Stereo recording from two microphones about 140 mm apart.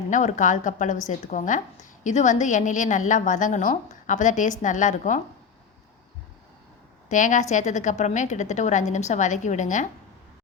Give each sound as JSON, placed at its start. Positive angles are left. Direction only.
{"t": 0.1, "sound": "a woman's voice", "side_deg": 60}
{"t": 7.1, "sound": "a woman's voice", "side_deg": 65}